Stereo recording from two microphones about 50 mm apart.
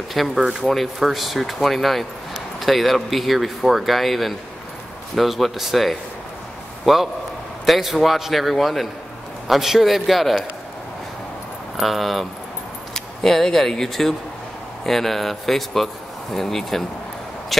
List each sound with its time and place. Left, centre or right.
0.1 s speech: centre
0.4 s speech: centre
0.9 s speech: centre
11.7 s speech: centre